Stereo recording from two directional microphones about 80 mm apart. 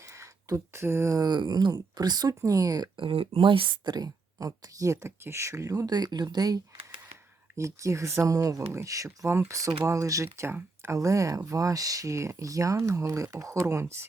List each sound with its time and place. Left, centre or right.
0.0 s a sound: right
1.1 s speech: right
2.4 s speech: right
7.5 s speech: right
9.0 s speech: right